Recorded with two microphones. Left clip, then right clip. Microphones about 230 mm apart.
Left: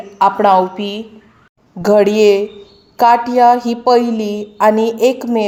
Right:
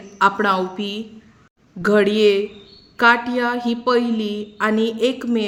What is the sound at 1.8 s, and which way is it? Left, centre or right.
A woman's voice, centre.